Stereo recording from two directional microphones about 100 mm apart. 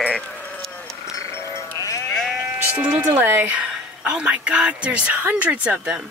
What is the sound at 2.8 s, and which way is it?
Music, 15° right (ahead or behind).